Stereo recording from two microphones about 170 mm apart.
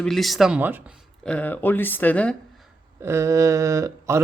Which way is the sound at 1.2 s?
5° left (ahead or behind).